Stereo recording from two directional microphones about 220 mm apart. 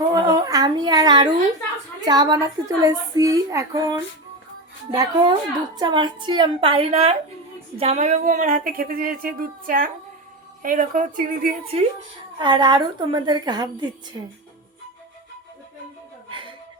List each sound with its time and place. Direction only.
0.1 s a sound: 15° right (ahead or behind)
2.0 s a woman's voice: 20° right (ahead or behind); by 11.5 s 40° right (ahead or behind)
12.4 s a woman's voice: 20° right (ahead or behind)